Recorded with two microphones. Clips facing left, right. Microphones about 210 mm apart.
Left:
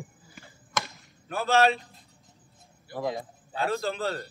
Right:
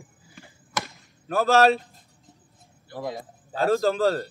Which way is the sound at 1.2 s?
40° right (ahead or behind).